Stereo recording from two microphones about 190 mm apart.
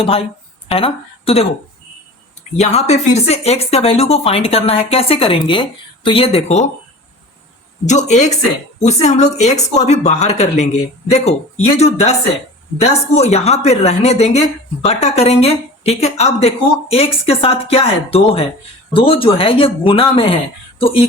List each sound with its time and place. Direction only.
0.0 s speech: 30° left (ahead or behind)
2.6 s speech: 35° left (ahead or behind)
7.9 s speech: 40° left (ahead or behind)